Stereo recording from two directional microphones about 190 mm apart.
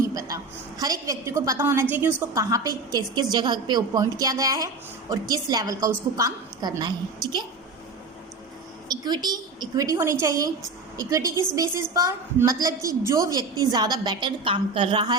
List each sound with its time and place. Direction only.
0.0 s a sound: 20° right (ahead or behind)
0.8 s a woman's voice: 20° right (ahead or behind)
8.9 s a woman's voice: 20° right (ahead or behind)